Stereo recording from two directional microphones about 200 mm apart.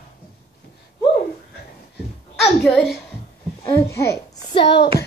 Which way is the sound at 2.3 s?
Centre (ahead or behind).